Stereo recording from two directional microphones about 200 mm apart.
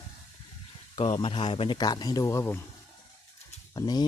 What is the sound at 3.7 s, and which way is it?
Speech, 20° left (ahead or behind).